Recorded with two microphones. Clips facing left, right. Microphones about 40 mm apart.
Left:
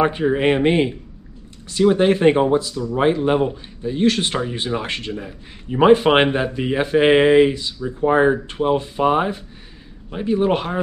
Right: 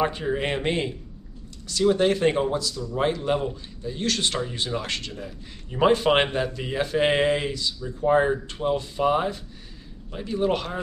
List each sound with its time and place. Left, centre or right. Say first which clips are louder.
0.0 s speech: left 7 dB; left